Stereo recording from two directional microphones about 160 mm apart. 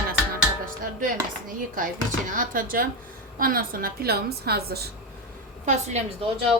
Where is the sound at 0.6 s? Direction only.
60° right (ahead or behind).